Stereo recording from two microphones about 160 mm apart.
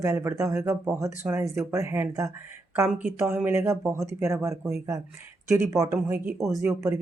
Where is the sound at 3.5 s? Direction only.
15° right (ahead or behind).